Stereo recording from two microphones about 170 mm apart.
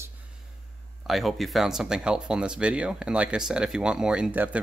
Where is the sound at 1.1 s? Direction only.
Centre (ahead or behind).